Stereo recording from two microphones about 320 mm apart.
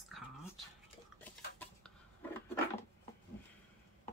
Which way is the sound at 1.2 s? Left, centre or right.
Centre.